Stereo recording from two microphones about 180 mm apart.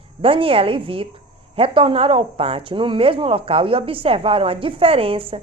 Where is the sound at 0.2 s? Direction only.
30° right (ahead or behind).